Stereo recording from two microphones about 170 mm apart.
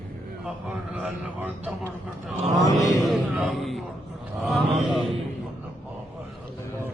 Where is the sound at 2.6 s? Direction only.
20° left (ahead or behind).